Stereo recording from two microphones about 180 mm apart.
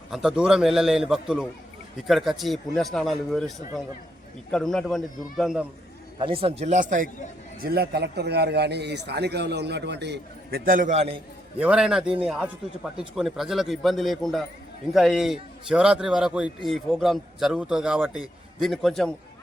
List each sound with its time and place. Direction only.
0.1 s speech: 5° right (ahead or behind)
6.1 s a man's voice: 30° right (ahead or behind); by 7.1 s 45° right (ahead or behind)
7.6 s a man's voice: 60° right (ahead or behind); by 11.1 s 40° right (ahead or behind)
11.6 s speech: 5° right (ahead or behind)